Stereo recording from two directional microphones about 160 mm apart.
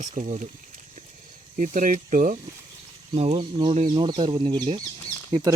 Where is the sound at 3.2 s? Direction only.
40° right (ahead or behind).